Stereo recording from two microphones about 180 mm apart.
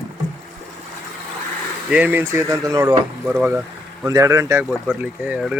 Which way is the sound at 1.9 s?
10° right (ahead or behind).